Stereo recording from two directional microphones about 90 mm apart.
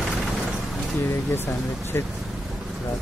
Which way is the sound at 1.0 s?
25° left (ahead or behind).